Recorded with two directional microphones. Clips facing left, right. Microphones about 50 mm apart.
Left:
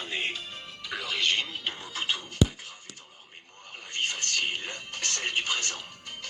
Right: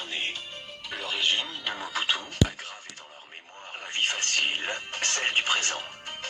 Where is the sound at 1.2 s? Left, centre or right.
Right.